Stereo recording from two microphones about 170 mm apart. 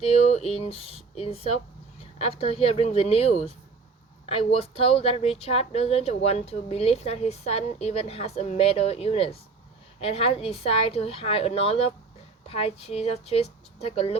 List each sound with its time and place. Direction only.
0.2 s speech: 35° left (ahead or behind)